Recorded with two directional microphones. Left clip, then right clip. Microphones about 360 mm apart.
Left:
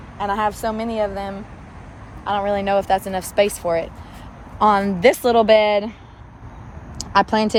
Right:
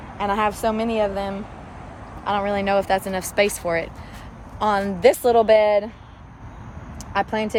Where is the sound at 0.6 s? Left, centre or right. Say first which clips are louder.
Right 1 dB; centre.